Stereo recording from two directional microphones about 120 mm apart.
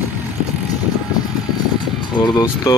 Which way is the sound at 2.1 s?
35° left (ahead or behind).